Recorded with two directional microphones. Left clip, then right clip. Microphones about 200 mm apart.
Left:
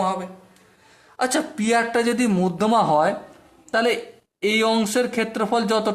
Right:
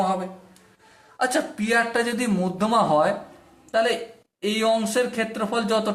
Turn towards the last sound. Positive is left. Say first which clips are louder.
# left 2 dB
turn(degrees=45)  # may be behind; listen again after turning